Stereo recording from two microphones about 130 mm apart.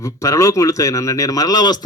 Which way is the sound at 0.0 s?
25° left (ahead or behind).